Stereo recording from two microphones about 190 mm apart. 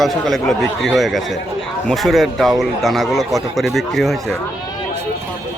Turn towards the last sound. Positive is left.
turn(degrees=0)  # may be behind; listen again after turning